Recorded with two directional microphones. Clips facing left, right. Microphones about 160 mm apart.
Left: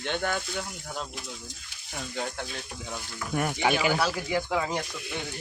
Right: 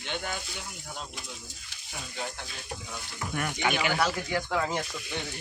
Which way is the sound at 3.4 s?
30° left (ahead or behind).